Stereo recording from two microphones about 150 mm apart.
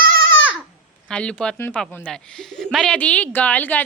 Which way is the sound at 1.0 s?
5° left (ahead or behind).